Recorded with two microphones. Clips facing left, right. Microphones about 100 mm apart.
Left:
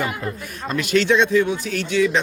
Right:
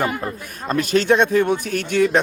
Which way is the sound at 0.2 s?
40° right (ahead or behind).